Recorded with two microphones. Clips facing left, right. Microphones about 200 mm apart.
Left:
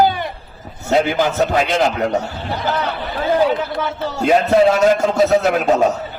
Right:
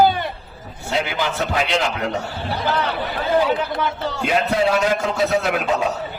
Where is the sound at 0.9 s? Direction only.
45° left (ahead or behind).